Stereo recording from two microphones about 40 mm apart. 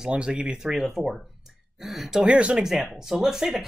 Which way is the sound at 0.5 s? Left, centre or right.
Centre.